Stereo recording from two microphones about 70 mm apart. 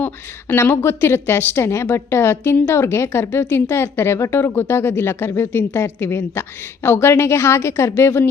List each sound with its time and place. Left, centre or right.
0.0 s a woman's voice: left